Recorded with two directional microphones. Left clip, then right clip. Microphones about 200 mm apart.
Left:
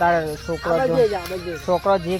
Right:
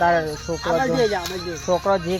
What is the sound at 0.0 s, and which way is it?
Speech, 10° left (ahead or behind).